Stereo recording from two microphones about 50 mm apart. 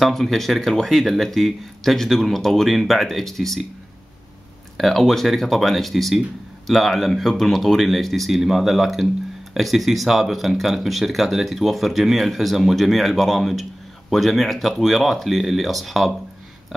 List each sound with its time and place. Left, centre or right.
0.0 s speech: centre
4.7 s speech: centre